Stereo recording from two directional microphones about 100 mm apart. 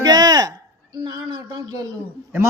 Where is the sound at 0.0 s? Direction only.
40° right (ahead or behind).